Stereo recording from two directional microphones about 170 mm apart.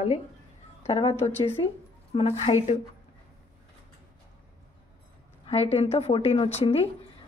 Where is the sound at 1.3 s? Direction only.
15° left (ahead or behind).